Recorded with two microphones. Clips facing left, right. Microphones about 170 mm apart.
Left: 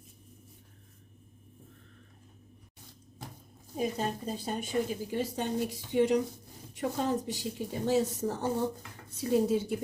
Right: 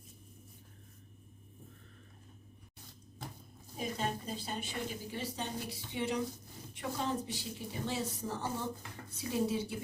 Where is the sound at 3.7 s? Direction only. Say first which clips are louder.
Left 5 dB; 40° left (ahead or behind).